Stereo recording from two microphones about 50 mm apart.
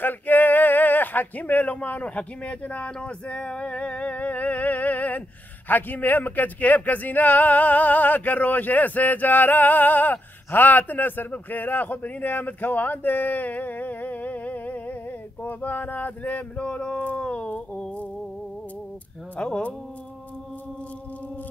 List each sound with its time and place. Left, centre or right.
0.0 s male singing: left
5.7 s speech: left